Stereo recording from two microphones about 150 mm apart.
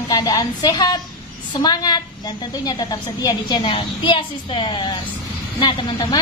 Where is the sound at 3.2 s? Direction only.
25° left (ahead or behind).